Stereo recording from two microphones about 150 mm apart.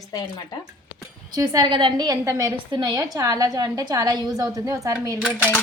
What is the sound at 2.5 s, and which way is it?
A woman's voice, 30° right (ahead or behind).